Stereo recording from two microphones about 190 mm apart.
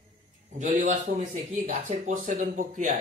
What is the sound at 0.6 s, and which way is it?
A man's voice, 40° right (ahead or behind).